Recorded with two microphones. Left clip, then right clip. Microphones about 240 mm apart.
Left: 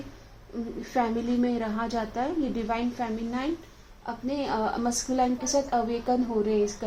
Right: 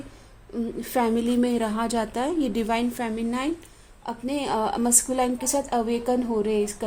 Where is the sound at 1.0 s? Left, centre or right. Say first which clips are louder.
Right 3 dB; right.